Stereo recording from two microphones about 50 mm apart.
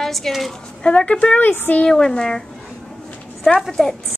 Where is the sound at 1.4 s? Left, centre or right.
Left.